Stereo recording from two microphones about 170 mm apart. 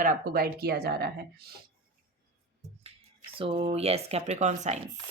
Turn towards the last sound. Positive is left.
turn(degrees=-45)  # may be behind; listen again after turning